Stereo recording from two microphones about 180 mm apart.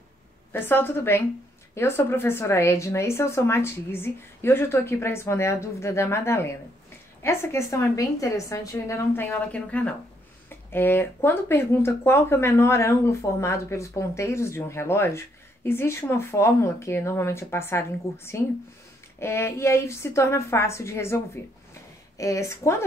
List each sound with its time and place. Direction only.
0.5 s speech: 10° left (ahead or behind)